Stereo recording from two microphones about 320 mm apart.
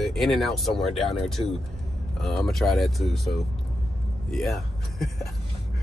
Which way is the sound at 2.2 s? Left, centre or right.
Centre.